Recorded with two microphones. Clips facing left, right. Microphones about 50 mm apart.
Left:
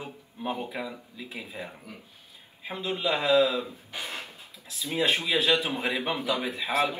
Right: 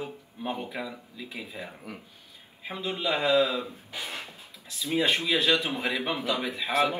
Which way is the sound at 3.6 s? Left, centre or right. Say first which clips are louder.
Even; left.